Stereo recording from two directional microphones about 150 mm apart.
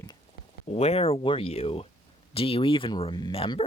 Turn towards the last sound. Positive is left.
turn(degrees=40)  # may be behind; listen again after turning